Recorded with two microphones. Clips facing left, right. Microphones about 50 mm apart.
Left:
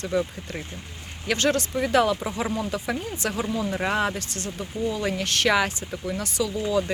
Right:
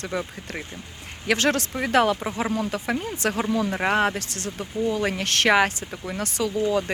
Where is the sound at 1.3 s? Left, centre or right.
Right.